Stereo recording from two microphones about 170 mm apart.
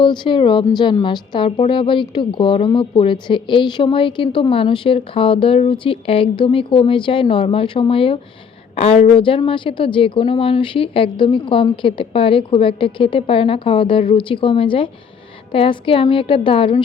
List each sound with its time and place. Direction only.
0.0 s a woman's voice: 30° left (ahead or behind)